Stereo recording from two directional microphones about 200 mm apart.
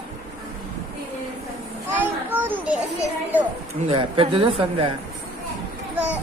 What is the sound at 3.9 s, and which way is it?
Speech, 25° right (ahead or behind).